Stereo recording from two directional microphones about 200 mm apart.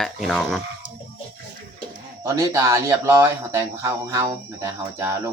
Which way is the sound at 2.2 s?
15° right (ahead or behind).